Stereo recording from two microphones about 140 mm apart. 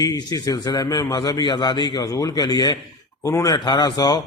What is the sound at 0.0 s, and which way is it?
A man's voice, 25° left (ahead or behind).